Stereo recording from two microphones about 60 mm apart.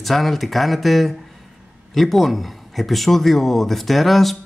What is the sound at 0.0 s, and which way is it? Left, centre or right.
Speech, centre.